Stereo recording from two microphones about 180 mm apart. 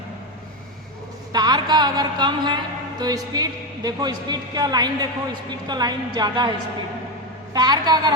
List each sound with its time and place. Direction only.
1.3 s a woman's voice: 20° right (ahead or behind)
7.5 s a woman's voice: 20° right (ahead or behind)